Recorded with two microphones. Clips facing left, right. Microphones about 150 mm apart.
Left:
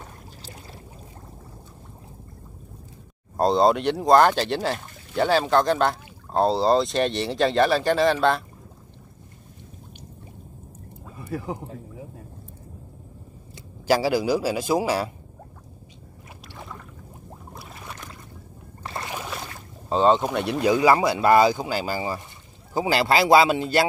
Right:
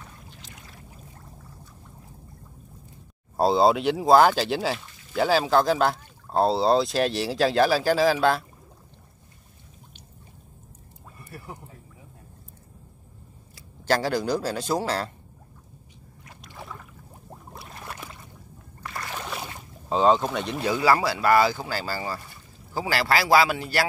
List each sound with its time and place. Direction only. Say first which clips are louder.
0.0 s a sound: left 4 dB; 35° left (ahead or behind)
3.3 s speech: left 1 dB; 5° right (ahead or behind)
11.2 s a sound: left 12 dB; 90° left
13.8 s speech: left 3 dB; 10° left (ahead or behind)
16.4 s rowboat: left 1 dB; centre (ahead or behind)
17.3 s boat: even; centre (ahead or behind)
18.8 s boat: left 3 dB; 25° left (ahead or behind)
19.1 s boat: left 1 dB; centre (ahead or behind)
19.9 s speech: left 1 dB; centre (ahead or behind)
20.2 s speech: left 4 dB; 10° left (ahead or behind)